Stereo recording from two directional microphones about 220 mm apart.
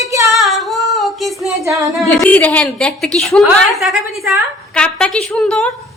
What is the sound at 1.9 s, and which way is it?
A woman's voice, centre (ahead or behind).